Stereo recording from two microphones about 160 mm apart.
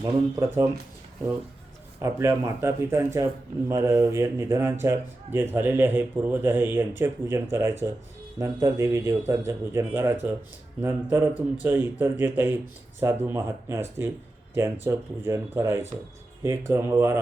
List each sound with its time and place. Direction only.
0.0 s a man's voice: 15° right (ahead or behind)
2.0 s a man's voice: 15° right (ahead or behind)